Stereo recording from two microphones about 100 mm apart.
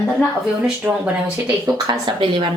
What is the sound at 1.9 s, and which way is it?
Speech, 50° right (ahead or behind).